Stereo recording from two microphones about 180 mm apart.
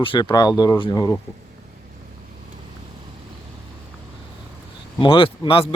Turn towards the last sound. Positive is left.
turn(degrees=30)  # may be behind; listen again after turning